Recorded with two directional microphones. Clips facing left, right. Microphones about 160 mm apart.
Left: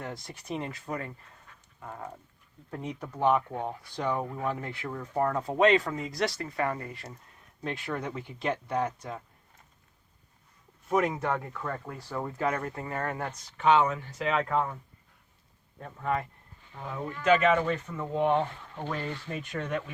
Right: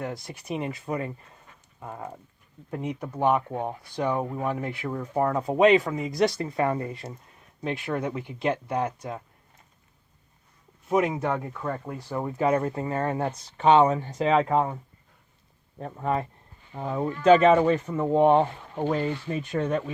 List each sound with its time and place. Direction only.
0.0 s speech: 10° right (ahead or behind)
10.8 s speech: 10° right (ahead or behind); by 14.8 s 30° right (ahead or behind)
15.8 s speech: 30° right (ahead or behind)